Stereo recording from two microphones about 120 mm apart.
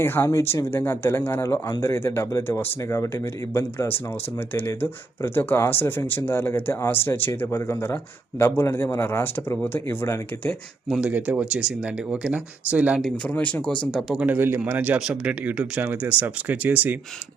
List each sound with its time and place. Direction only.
0.0 s speech: 20° left (ahead or behind)
11.0 s a man's voice: 10° right (ahead or behind)
13.2 s speech: 10° left (ahead or behind)
14.3 s a man's voice: 20° right (ahead or behind)